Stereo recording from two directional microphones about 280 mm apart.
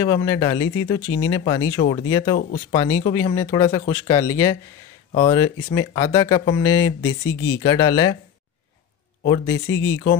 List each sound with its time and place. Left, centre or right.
0.0 s speech: centre
7.0 s speech: left
7.6 s speech: centre
9.2 s speech: centre